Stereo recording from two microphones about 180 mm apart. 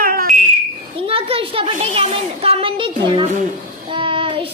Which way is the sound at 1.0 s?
30° right (ahead or behind).